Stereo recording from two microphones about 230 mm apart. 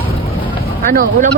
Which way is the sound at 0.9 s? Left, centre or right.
Right.